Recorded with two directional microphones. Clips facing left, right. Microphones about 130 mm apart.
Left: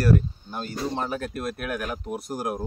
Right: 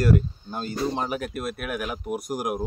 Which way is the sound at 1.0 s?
10° right (ahead or behind).